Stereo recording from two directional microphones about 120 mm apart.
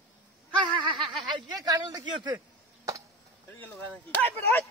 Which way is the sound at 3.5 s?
15° left (ahead or behind).